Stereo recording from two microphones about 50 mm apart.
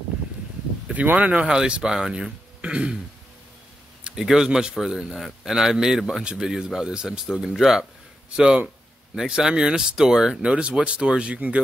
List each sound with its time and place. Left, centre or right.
0.9 s speech: right
1.5 s speech: centre
4.0 s a man's voice: centre
8.3 s a man's voice: centre